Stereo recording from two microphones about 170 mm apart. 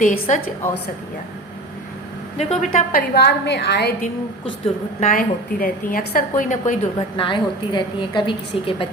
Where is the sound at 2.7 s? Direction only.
65° left (ahead or behind).